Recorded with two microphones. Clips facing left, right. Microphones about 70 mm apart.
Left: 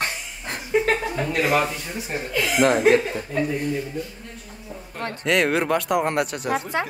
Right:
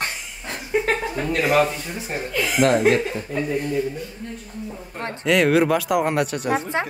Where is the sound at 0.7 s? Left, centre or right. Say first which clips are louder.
Left 1 dB; centre.